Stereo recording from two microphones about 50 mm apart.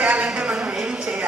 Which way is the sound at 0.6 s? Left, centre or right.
Centre.